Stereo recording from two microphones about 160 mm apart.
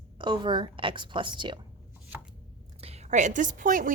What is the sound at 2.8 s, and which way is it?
A woman's voice, 40° right (ahead or behind).